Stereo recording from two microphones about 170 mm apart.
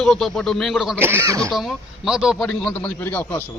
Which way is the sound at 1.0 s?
15° right (ahead or behind).